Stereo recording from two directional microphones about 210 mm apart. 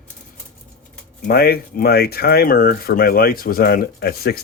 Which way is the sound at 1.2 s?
45° left (ahead or behind).